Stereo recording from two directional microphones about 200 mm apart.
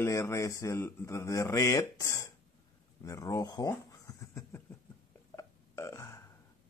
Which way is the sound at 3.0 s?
15° left (ahead or behind).